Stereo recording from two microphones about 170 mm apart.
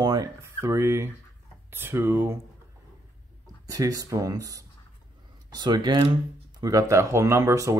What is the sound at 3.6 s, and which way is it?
Speech, 20° right (ahead or behind).